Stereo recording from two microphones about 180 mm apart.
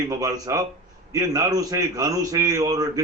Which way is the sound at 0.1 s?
20° right (ahead or behind).